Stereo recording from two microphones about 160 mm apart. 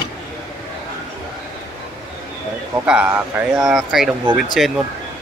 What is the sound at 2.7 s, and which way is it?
Speech, 10° right (ahead or behind).